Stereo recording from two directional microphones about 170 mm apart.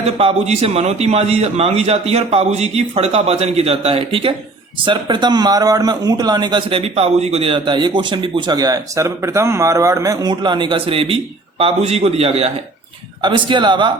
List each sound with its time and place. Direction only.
0.2 s a man's voice: 35° right (ahead or behind)